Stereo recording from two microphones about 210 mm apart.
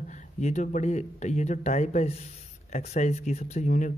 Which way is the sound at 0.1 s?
35° left (ahead or behind).